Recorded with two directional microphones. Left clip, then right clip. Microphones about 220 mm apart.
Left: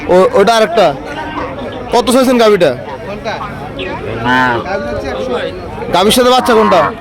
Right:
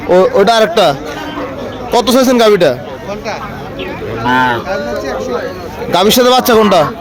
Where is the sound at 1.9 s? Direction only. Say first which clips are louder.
Even; 5° right (ahead or behind).